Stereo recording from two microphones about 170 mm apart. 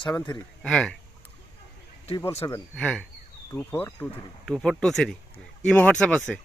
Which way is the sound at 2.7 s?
5° left (ahead or behind).